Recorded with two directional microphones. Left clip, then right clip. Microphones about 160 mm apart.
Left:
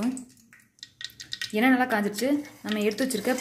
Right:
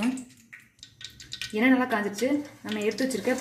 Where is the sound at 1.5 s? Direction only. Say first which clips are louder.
Left 1 dB; 45° left (ahead or behind).